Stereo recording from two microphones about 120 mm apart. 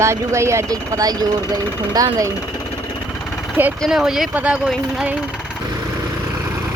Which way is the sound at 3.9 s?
5° right (ahead or behind).